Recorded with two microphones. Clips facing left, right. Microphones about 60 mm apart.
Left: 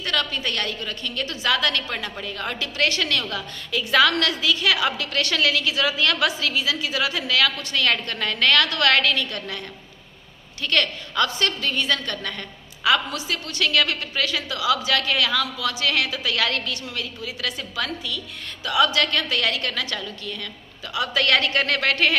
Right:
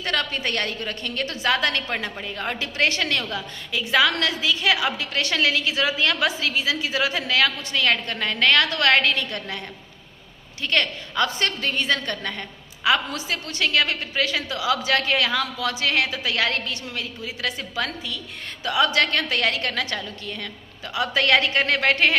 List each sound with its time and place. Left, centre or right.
0.0 s a woman's voice: right
3.2 s a woman's voice: centre
10.6 s a woman's voice: right
11.3 s a woman's voice: right